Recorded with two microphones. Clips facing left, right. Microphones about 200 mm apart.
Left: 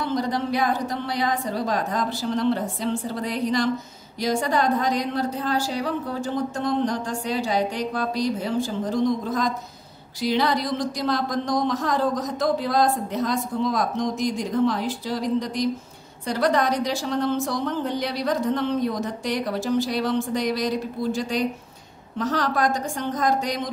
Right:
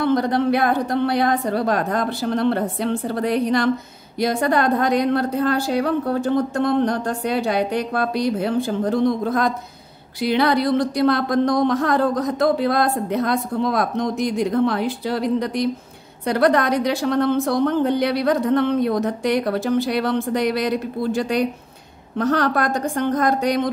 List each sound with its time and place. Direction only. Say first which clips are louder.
0.0 s speech: right 7 dB; 60° right (ahead or behind)